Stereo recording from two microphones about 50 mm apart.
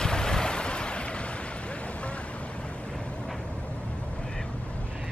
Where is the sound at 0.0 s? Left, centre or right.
Centre.